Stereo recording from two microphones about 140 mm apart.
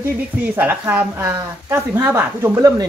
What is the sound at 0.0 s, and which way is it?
A woman's voice, 15° right (ahead or behind).